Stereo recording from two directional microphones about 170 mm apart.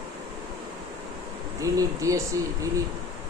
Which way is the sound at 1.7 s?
20° right (ahead or behind).